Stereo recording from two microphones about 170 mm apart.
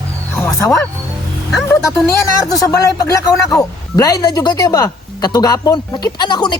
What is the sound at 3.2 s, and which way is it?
Speech, 20° left (ahead or behind).